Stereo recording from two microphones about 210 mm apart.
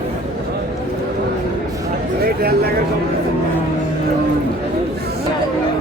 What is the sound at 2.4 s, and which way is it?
Speech, 45° right (ahead or behind).